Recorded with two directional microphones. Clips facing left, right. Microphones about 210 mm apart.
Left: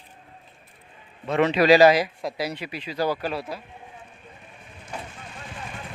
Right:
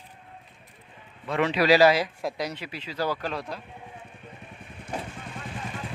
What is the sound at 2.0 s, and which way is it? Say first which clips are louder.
Speech: left 1 dB; 5° left (ahead or behind).